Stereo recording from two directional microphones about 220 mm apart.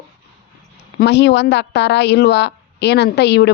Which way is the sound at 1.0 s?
50° left (ahead or behind).